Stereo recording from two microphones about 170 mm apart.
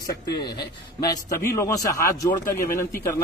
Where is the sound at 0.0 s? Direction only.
70° left (ahead or behind).